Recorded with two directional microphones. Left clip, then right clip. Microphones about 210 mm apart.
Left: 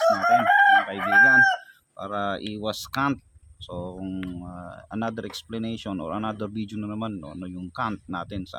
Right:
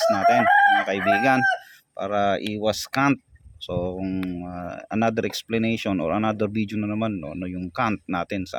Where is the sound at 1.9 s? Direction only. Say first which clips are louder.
Right 6 dB; 35° right (ahead or behind).